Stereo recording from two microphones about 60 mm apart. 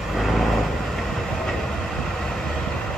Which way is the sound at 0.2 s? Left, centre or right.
Centre.